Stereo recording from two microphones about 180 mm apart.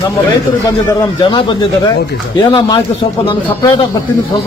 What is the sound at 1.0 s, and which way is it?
Speech, 25° left (ahead or behind).